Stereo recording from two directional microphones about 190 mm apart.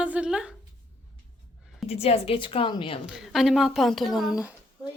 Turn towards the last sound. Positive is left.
turn(degrees=0)  # may be behind; listen again after turning